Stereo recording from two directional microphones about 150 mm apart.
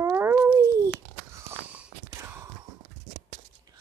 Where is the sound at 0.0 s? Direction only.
15° right (ahead or behind).